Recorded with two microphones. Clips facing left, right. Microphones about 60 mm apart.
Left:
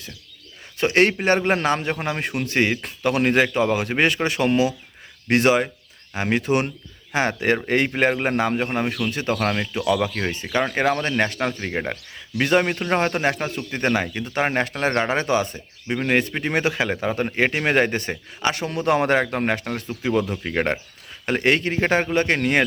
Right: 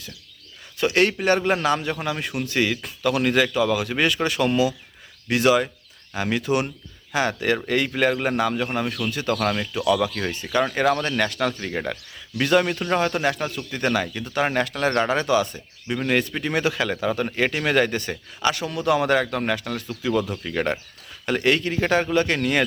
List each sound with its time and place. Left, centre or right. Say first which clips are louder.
0.8 s a man's voice: left 2 dB; left